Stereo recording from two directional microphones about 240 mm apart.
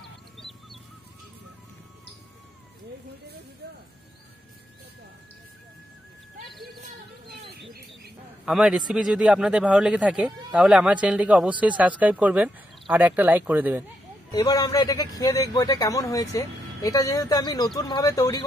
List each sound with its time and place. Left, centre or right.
0.4 s music: centre
7.2 s a sound: right
8.5 s speech: centre
14.3 s a man's voice: centre